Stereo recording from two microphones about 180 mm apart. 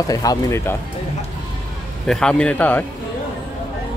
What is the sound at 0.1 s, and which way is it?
Speech, 20° left (ahead or behind).